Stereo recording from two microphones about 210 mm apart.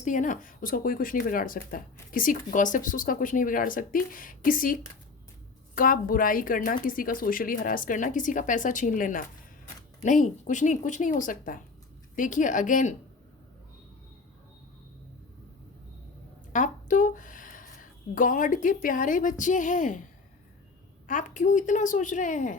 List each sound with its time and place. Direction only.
0.0 s speech: 35° left (ahead or behind)
16.5 s a woman's voice: 35° left (ahead or behind)
21.1 s speech: 35° left (ahead or behind)